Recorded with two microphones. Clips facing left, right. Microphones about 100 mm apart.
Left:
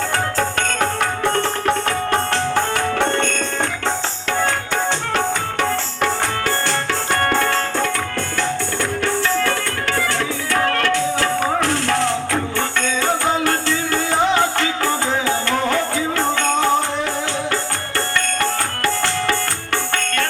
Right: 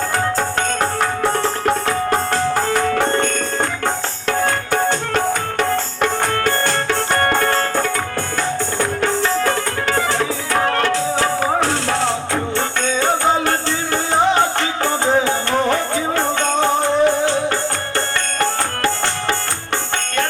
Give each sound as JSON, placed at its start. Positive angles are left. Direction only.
{"t": 7.2, "sound": "music", "side_deg": -45}